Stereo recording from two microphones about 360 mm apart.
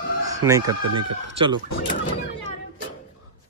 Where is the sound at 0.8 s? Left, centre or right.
Right.